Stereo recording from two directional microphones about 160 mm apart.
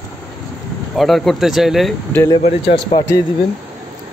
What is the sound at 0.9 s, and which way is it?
Speech, centre (ahead or behind).